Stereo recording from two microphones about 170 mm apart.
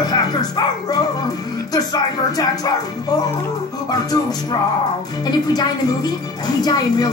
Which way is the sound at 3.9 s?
20° left (ahead or behind).